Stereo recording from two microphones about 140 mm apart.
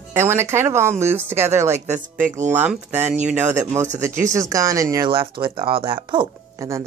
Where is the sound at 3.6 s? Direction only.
20° right (ahead or behind).